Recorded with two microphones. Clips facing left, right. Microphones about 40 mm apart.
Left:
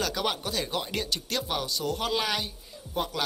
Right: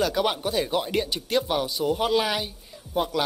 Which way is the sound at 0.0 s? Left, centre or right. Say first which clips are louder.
Right 5 dB; centre.